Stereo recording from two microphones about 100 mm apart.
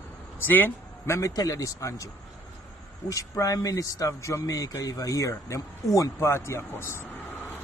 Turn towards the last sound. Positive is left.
turn(degrees=25)  # may be behind; listen again after turning